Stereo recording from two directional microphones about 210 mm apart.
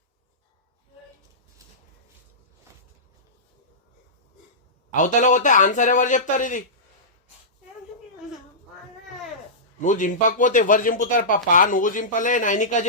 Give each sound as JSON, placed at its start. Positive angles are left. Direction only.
{"t": 4.9, "sound": "a man's voice", "side_deg": 35}
{"t": 9.8, "sound": "a man's voice", "side_deg": 35}